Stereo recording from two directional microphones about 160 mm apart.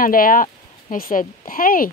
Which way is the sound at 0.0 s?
60° left (ahead or behind).